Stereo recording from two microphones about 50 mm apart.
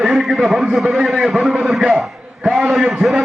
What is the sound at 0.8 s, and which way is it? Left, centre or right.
Speech, right.